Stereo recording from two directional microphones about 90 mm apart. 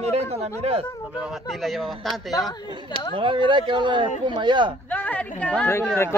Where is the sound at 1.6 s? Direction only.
Centre (ahead or behind).